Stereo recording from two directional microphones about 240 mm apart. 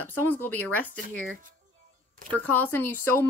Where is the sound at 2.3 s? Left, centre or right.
Centre.